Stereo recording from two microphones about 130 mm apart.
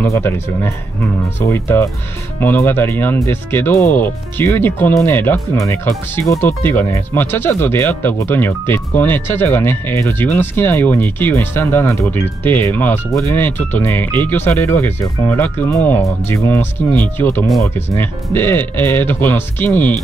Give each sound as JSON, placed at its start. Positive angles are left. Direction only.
{"t": 0.0, "sound": "speech", "side_deg": 20}